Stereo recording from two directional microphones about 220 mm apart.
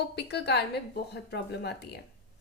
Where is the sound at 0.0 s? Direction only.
50° left (ahead or behind).